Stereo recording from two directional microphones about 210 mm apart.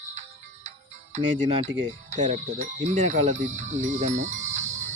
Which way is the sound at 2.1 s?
35° right (ahead or behind).